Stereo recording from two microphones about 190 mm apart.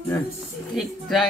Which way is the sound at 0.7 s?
Centre (ahead or behind).